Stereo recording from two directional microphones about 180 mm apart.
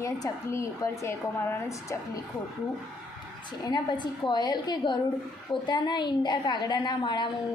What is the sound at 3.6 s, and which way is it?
A woman's voice, 25° left (ahead or behind).